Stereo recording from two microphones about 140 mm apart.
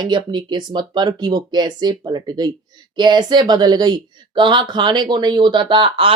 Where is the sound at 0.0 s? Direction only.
35° right (ahead or behind).